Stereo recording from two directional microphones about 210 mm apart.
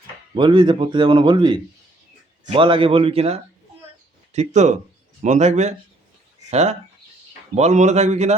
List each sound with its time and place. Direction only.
0.3 s a man's voice: 25° right (ahead or behind)